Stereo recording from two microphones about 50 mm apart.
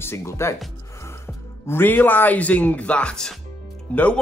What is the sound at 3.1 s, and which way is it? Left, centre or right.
Speech, centre.